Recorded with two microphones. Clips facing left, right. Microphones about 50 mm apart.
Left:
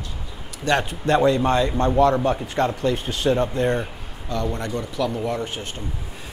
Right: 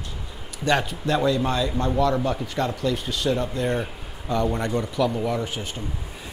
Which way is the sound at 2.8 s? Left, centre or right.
Left.